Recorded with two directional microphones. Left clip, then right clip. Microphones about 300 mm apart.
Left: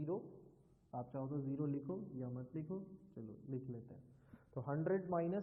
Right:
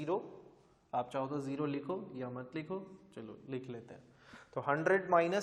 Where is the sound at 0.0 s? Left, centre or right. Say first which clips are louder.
Right 7 dB; centre.